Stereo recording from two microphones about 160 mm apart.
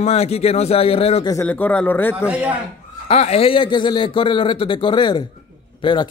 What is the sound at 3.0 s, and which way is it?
A man's voice, 40° left (ahead or behind).